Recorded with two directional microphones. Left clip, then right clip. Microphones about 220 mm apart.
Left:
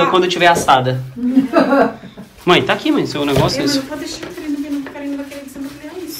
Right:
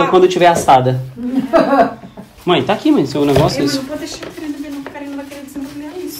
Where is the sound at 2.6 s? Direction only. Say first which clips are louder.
Right 2 dB; 20° right (ahead or behind).